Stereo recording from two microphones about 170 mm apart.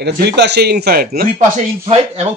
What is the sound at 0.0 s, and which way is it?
A man's voice, 80° right.